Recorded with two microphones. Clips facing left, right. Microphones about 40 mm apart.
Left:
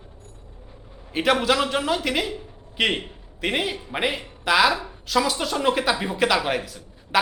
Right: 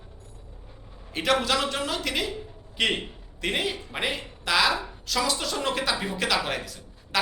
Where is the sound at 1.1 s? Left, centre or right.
Centre.